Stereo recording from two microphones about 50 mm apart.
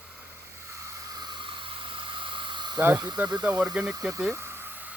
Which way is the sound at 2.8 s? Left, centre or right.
Right.